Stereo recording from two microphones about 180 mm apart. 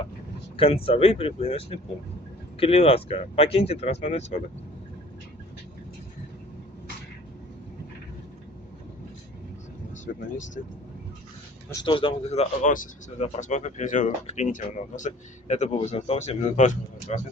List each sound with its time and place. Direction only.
0.5 s speech: 30° left (ahead or behind)
11.7 s speech: 25° left (ahead or behind)